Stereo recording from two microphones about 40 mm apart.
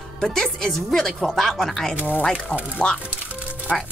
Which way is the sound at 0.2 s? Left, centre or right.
Centre.